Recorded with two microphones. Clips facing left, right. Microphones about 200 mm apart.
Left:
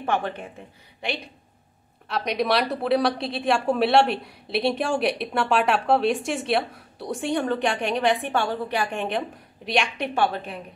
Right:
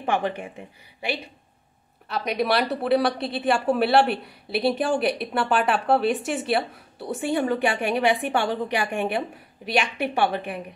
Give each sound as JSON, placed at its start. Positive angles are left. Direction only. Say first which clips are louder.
{"t": 0.0, "sound": "a woman's voice", "louder": "right 1 dB", "side_deg": -15}
{"t": 2.0, "sound": "a woman's voice", "louder": "even", "side_deg": 0}